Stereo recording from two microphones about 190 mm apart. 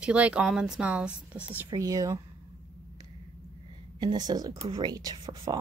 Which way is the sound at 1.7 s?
20° right (ahead or behind).